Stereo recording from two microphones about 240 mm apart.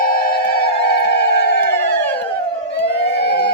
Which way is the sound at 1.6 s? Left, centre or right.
Centre.